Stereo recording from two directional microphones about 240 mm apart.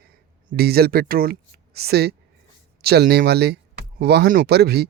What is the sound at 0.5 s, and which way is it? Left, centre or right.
Speech, right.